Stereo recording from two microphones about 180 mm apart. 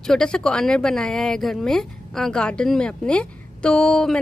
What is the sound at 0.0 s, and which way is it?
Speech, 5° left (ahead or behind).